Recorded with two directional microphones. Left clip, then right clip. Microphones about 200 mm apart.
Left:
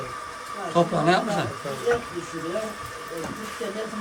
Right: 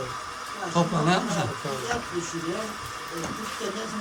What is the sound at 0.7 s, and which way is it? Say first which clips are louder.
Speech: left 4 dB; 10° right (ahead or behind).